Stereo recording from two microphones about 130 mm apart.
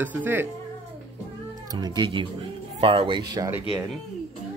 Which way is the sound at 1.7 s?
30° right (ahead or behind).